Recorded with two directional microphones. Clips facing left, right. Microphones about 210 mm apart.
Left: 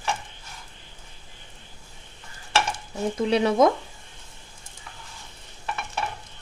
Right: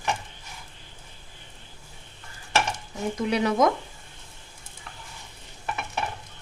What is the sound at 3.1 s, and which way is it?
Speech, 30° left (ahead or behind).